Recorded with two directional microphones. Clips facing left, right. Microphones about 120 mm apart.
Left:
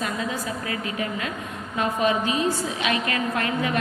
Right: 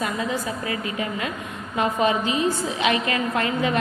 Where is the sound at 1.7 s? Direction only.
20° right (ahead or behind).